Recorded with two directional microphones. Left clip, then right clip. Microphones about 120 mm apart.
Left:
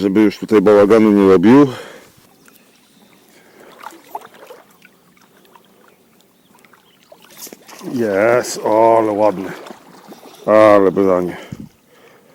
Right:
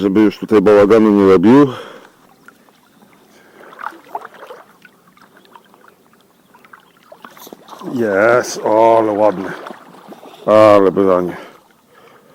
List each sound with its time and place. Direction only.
0.0 s a man's voice: 35° left (ahead or behind)
0.4 s a man's voice: 25° left (ahead or behind)
1.6 s a sound: 40° left (ahead or behind)
3.6 s rowboat: 20° left (ahead or behind)
7.1 s boat: 25° left (ahead or behind)
8.1 s speech: 45° left (ahead or behind)
8.4 s a man's voice: 25° left (ahead or behind)
9.5 s boat: 20° left (ahead or behind)
10.1 s a sound: centre (ahead or behind)
10.5 s a man's voice: 25° left (ahead or behind)
10.9 s a man's voice: 35° left (ahead or behind)
11.3 s speech: 45° left (ahead or behind)